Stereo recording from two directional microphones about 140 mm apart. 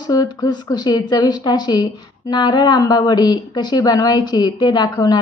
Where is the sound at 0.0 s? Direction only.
25° left (ahead or behind).